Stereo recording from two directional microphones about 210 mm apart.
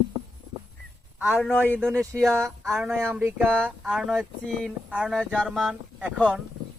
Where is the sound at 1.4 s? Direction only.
5° left (ahead or behind).